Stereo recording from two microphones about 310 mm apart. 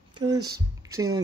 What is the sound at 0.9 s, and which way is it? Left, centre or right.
Speech, centre.